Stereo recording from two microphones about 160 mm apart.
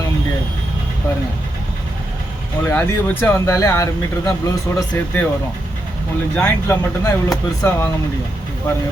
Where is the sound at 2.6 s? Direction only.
15° left (ahead or behind).